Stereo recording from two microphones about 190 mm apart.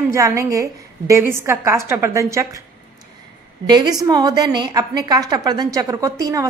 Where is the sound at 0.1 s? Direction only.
15° right (ahead or behind).